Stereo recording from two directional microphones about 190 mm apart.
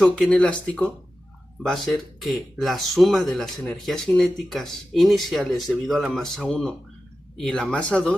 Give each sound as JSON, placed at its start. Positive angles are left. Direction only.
{"t": 0.0, "sound": "speech", "side_deg": 5}